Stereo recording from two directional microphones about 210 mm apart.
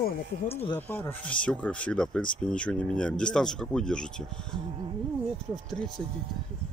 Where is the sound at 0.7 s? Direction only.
10° left (ahead or behind).